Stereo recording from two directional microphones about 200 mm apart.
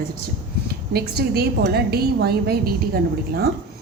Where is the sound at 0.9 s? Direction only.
50° right (ahead or behind).